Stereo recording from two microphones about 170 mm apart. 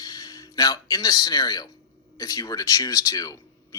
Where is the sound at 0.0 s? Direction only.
20° left (ahead or behind).